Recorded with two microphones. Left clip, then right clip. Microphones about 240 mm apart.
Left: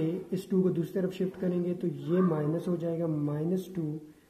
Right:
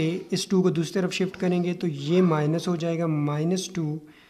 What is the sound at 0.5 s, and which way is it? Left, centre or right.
Speech, right.